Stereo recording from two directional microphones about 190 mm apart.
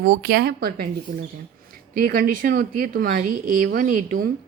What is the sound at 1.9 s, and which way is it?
A woman's voice, 50° right (ahead or behind).